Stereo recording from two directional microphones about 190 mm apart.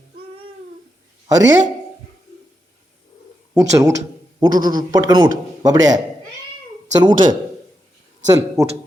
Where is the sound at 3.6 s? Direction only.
15° right (ahead or behind).